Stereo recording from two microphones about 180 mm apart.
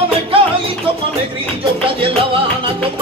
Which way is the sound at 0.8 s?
30° right (ahead or behind).